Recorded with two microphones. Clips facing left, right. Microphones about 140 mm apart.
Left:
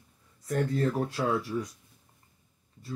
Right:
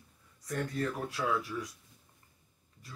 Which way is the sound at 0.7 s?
30° left (ahead or behind).